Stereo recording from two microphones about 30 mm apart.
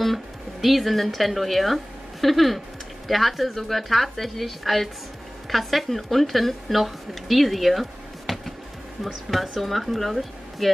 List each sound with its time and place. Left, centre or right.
0.0 s speech: centre